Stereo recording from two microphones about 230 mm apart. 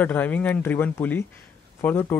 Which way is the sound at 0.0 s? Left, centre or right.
Centre.